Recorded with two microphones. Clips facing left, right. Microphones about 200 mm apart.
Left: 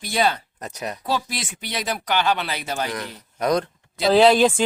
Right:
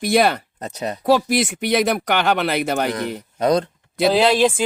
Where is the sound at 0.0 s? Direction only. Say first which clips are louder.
Right 6 dB; 65° right (ahead or behind).